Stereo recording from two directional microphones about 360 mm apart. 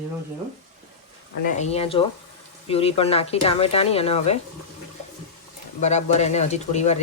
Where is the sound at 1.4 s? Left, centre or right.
Centre.